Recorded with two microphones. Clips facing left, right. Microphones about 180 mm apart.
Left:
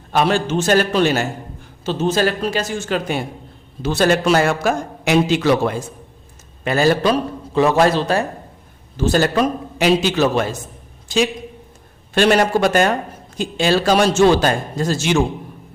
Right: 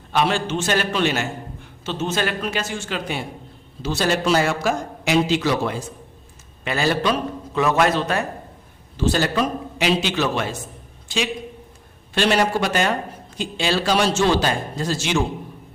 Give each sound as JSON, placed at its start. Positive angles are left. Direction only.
{"t": 0.1, "sound": "a man's voice", "side_deg": 45}
{"t": 6.7, "sound": "a man's voice", "side_deg": 45}
{"t": 9.0, "sound": "a man's voice", "side_deg": 45}